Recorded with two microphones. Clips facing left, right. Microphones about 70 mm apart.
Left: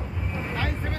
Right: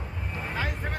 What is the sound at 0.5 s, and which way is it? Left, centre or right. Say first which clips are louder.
Vehicle: even; centre.